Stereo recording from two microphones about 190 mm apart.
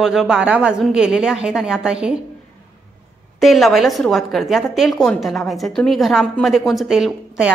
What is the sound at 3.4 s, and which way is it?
A woman's voice, centre (ahead or behind).